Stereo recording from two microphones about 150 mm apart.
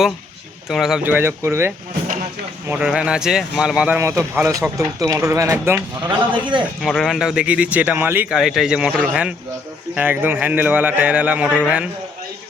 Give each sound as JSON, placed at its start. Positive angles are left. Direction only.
{"t": 0.7, "sound": "speech", "side_deg": 0}
{"t": 6.0, "sound": "a man's voice", "side_deg": -30}
{"t": 6.8, "sound": "speech", "side_deg": 0}
{"t": 11.4, "sound": "a man's voice", "side_deg": 10}